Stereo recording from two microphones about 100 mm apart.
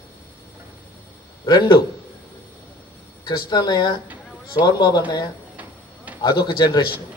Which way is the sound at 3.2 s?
40° left (ahead or behind).